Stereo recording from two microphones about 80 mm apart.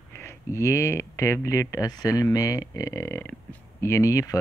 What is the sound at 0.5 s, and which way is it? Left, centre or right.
Speech, left.